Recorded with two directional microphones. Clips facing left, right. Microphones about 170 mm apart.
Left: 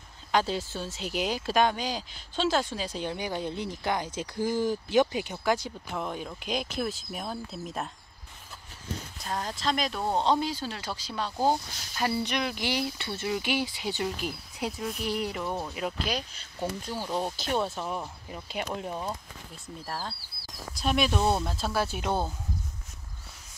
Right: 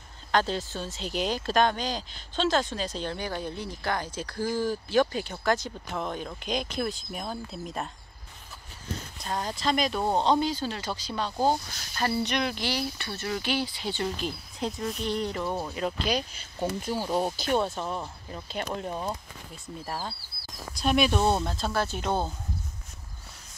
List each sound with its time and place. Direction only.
0.3 s speech: 10° left (ahead or behind)
9.2 s speech: centre (ahead or behind)
12.6 s speech: 20° left (ahead or behind)